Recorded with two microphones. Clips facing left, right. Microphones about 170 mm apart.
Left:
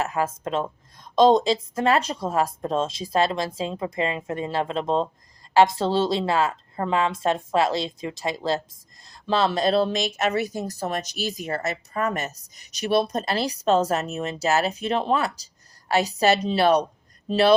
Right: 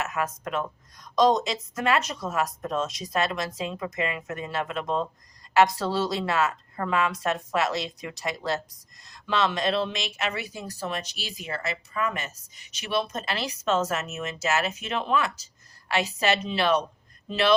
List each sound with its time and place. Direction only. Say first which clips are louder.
0.0 s a woman's voice: left 4 dB; 30° left (ahead or behind)